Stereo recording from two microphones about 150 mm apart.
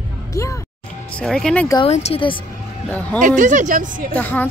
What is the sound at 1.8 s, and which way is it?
Speech, 45° left (ahead or behind).